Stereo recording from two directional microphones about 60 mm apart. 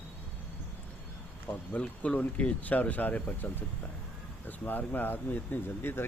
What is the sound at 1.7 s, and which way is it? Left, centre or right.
Speech, left.